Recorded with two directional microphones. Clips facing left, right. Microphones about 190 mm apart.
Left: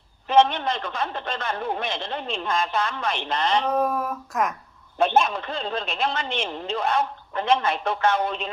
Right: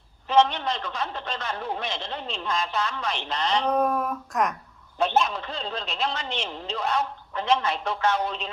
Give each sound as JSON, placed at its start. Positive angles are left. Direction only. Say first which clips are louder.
{"t": 0.3, "sound": "a man's voice", "louder": "left 2 dB", "side_deg": 55}
{"t": 3.7, "sound": "a sound", "louder": "even", "side_deg": 0}
{"t": 4.9, "sound": "a man's voice", "louder": "left 3 dB", "side_deg": 55}